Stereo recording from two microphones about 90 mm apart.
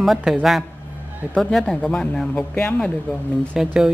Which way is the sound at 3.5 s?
5° right (ahead or behind).